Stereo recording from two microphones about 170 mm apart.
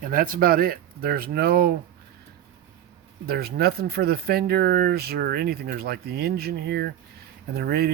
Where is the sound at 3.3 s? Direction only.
65° right (ahead or behind).